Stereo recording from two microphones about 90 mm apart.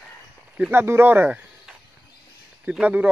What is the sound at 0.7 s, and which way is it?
Speech, 25° right (ahead or behind).